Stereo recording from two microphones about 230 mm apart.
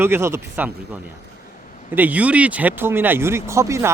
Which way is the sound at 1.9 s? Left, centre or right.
Centre.